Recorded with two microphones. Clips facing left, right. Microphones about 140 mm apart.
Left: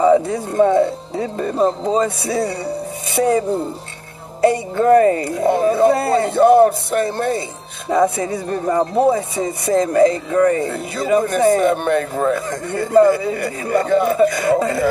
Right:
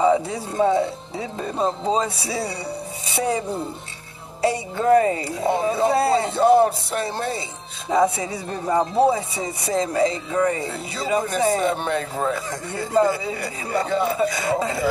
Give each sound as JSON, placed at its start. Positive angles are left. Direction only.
{"t": 0.0, "sound": "speech", "side_deg": 55}